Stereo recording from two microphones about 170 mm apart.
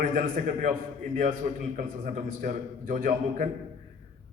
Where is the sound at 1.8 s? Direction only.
55° right (ahead or behind).